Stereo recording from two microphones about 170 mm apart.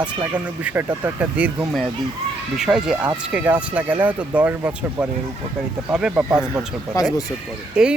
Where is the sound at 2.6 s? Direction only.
5° right (ahead or behind).